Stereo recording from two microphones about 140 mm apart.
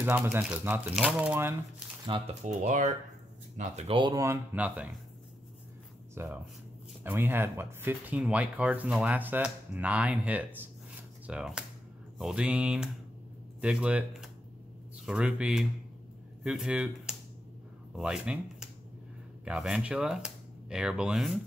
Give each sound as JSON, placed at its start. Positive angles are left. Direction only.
{"t": 0.0, "sound": "speech", "side_deg": -15}
{"t": 2.4, "sound": "speech", "side_deg": -55}
{"t": 3.9, "sound": "speech", "side_deg": -30}
{"t": 4.6, "sound": "speech", "side_deg": -10}
{"t": 6.1, "sound": "speech", "side_deg": -20}